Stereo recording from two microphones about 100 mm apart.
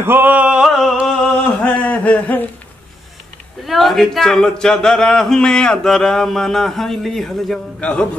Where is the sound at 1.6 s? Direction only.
15° left (ahead or behind).